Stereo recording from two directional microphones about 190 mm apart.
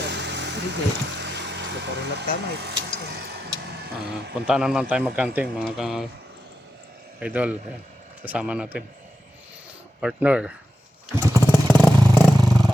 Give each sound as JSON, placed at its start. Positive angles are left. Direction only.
{"t": 0.0, "sound": "vehicle", "side_deg": -65}
{"t": 4.4, "sound": "a man's voice", "side_deg": 0}
{"t": 7.2, "sound": "a man's voice", "side_deg": -5}
{"t": 10.0, "sound": "a man's voice", "side_deg": -5}
{"t": 11.3, "sound": "vehicle", "side_deg": 10}